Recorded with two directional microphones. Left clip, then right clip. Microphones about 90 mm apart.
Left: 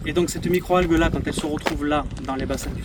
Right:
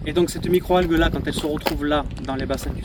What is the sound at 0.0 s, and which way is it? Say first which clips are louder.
Speech: right 1 dB; 45° left (ahead or behind).